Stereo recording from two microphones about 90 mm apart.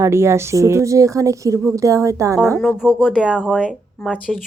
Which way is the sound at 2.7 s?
5° right (ahead or behind).